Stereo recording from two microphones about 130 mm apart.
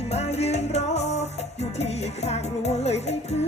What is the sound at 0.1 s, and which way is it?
Music, 55° left (ahead or behind).